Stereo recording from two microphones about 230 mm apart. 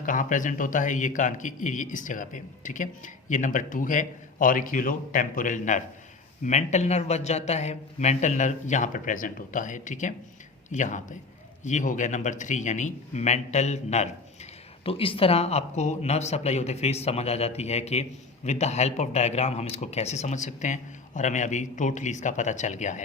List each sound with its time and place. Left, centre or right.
0.0 s a man's voice: left